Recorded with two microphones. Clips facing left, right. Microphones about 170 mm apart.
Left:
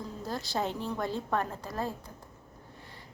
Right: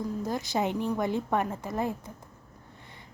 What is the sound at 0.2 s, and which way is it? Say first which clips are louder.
A woman's voice: right 2 dB; 20° right (ahead or behind).